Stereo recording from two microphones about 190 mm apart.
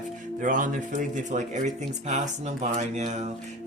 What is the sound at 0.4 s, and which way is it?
Speech, 45° right (ahead or behind).